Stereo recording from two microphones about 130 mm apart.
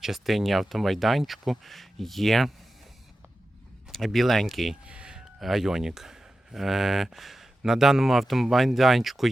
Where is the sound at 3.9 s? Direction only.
Centre (ahead or behind).